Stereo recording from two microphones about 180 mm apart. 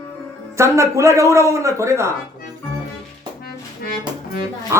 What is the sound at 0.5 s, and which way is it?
A man's voice, 15° right (ahead or behind).